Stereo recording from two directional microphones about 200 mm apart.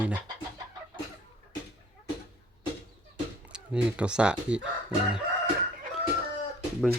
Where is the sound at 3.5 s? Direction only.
5° right (ahead or behind).